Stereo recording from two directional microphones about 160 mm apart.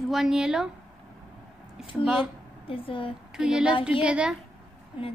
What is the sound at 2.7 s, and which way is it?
Speech, 35° left (ahead or behind).